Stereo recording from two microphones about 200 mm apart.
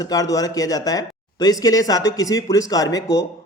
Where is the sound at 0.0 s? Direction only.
20° left (ahead or behind).